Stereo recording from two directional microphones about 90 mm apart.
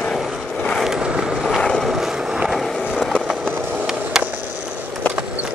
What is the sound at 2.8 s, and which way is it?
Skateboard, 10° right (ahead or behind).